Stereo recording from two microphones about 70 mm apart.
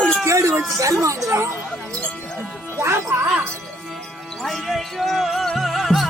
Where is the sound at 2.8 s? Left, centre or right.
Right.